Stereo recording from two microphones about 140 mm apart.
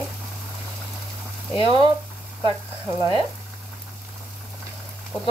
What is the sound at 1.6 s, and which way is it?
Speech, 35° right (ahead or behind).